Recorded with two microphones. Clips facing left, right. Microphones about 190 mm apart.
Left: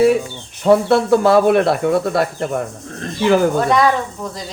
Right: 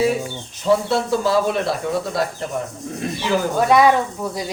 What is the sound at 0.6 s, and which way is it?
Speech, 60° left (ahead or behind).